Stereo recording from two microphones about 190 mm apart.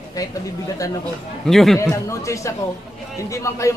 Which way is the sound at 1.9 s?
15° left (ahead or behind).